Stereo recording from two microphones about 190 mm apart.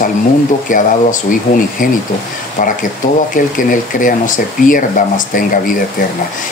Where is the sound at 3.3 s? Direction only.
45° left (ahead or behind).